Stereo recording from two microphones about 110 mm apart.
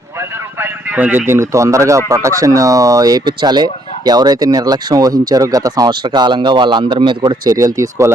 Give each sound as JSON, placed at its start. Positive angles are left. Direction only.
{"t": 0.9, "sound": "a man's voice", "side_deg": -15}
{"t": 1.3, "sound": "speech", "side_deg": -25}